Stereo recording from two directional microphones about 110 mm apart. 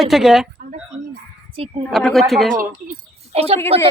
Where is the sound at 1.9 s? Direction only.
Centre (ahead or behind).